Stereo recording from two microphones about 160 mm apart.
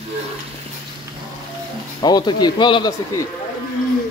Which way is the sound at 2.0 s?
25° left (ahead or behind).